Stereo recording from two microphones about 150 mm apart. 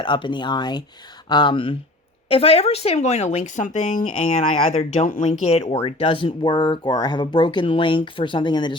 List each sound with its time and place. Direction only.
0.0 s speech: 30° left (ahead or behind)